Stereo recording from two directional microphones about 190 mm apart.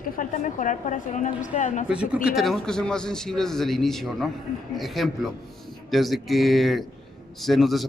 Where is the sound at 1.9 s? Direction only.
5° right (ahead or behind).